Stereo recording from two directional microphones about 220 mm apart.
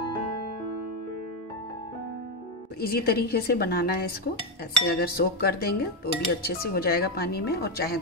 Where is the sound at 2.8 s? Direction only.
45° left (ahead or behind).